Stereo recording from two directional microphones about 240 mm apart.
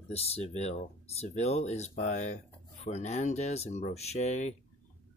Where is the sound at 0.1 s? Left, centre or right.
Left.